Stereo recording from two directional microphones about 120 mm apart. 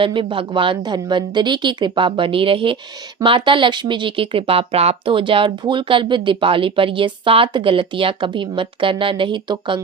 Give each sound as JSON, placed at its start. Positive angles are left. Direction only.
{"t": 0.0, "sound": "speech", "side_deg": -45}